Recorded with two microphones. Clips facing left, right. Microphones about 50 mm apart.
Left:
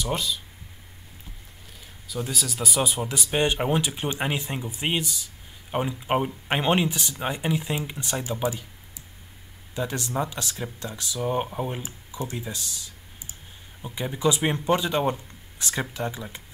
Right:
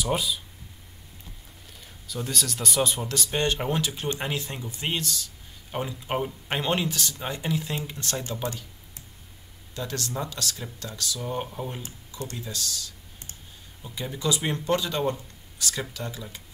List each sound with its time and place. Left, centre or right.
0.0 s speech: centre
2.0 s speech: centre
9.8 s speech: centre